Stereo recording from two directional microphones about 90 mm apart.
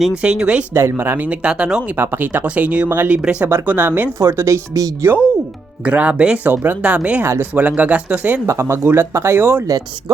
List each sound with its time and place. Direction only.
0.2 s speech: 10° right (ahead or behind)
0.7 s speech: 30° right (ahead or behind)
1.3 s speech: 15° right (ahead or behind)
2.0 s speech: 25° right (ahead or behind)
3.5 s speech: 20° right (ahead or behind)
5.8 s speech: 15° right (ahead or behind)
8.4 s speech: 30° right (ahead or behind)